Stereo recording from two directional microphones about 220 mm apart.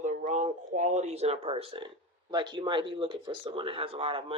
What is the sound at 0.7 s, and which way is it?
Speech, 30° right (ahead or behind).